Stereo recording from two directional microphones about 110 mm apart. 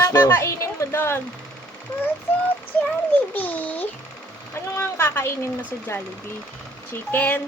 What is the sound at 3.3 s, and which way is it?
A child's voice, 15° left (ahead or behind).